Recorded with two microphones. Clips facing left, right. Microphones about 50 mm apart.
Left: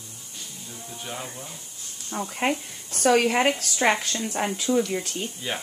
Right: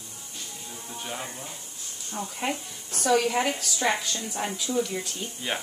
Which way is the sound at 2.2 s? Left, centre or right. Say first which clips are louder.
Left 5 dB; left.